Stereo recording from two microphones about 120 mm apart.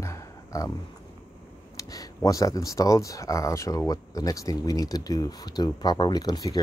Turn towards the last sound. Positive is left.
turn(degrees=35)  # may be behind; listen again after turning